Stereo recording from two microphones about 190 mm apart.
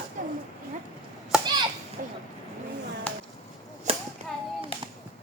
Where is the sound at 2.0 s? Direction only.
45° right (ahead or behind).